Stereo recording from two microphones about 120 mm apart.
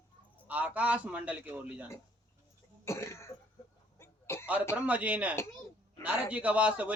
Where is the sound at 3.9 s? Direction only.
20° left (ahead or behind).